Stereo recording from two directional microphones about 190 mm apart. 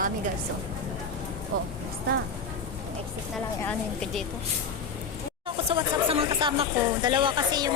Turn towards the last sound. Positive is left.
turn(degrees=-25)  # may be behind; listen again after turning